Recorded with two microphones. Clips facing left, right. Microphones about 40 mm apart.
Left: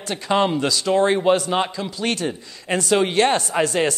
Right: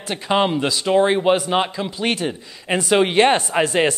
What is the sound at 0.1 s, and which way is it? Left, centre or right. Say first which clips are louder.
A man's voice: right 1 dB; centre.